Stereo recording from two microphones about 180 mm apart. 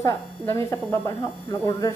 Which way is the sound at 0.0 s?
15° left (ahead or behind).